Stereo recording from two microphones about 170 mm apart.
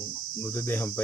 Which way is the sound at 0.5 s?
10° left (ahead or behind).